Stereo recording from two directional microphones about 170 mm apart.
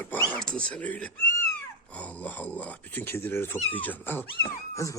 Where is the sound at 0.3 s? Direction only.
5° left (ahead or behind).